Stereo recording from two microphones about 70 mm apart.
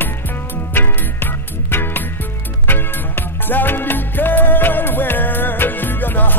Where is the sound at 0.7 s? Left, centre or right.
Left.